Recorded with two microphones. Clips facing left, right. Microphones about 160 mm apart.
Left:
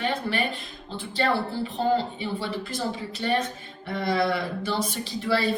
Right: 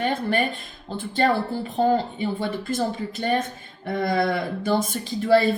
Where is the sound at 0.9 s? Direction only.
50° right (ahead or behind).